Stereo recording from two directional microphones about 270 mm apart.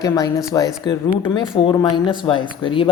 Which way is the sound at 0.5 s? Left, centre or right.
Centre.